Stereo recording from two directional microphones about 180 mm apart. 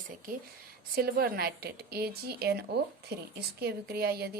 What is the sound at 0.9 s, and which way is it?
A woman's voice, 55° right (ahead or behind).